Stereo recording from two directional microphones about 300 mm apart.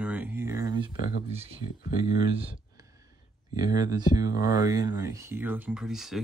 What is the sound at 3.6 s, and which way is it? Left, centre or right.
Speech, centre.